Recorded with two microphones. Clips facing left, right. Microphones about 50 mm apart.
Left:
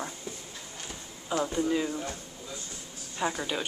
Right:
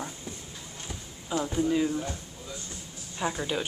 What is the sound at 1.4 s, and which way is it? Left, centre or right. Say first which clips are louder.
Speech: right 1 dB; centre.